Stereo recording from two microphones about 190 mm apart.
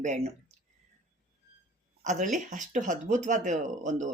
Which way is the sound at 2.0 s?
40° right (ahead or behind).